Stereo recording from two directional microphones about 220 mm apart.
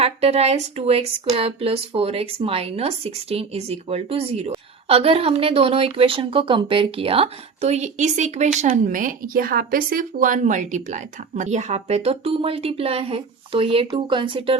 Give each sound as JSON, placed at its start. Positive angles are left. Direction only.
{"t": 0.0, "sound": "speech", "side_deg": -30}